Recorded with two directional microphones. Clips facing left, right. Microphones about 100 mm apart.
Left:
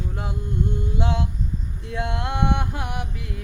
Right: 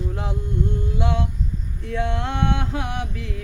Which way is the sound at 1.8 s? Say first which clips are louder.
Right 3 dB; 15° left (ahead or behind).